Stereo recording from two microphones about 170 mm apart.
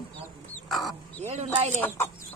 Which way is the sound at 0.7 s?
Centre (ahead or behind).